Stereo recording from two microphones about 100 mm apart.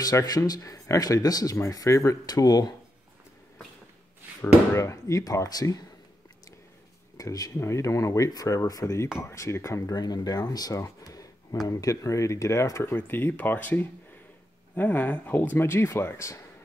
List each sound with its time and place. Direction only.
0.0 s speech: 40° left (ahead or behind)
4.7 s speech: 30° left (ahead or behind)
7.2 s speech: 35° left (ahead or behind)
9.9 s speech: 40° left (ahead or behind); by 16.3 s 25° left (ahead or behind)